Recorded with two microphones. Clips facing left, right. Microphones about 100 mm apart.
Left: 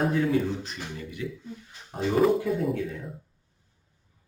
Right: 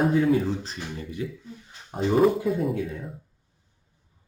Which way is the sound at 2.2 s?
Centre (ahead or behind).